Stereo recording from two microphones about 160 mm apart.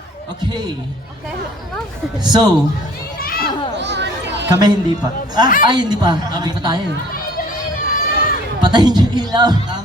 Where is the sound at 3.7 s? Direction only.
90° right.